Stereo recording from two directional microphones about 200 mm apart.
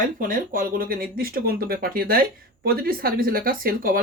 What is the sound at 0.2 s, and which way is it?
Speech, 45° right (ahead or behind).